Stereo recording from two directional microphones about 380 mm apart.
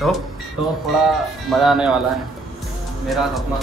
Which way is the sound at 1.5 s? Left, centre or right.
Centre.